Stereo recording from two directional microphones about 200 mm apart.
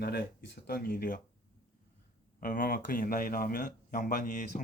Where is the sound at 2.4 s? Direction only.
45° left (ahead or behind).